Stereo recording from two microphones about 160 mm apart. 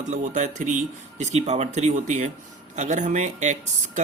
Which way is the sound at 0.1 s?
50° right (ahead or behind).